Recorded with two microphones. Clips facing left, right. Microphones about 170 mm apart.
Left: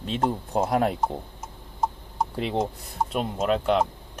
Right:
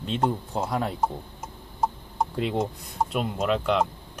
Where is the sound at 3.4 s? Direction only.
40° left (ahead or behind).